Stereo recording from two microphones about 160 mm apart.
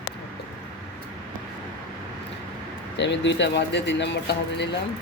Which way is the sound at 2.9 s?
90° left.